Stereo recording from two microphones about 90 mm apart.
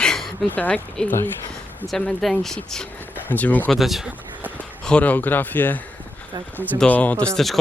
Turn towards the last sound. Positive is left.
turn(degrees=5)  # may be behind; listen again after turning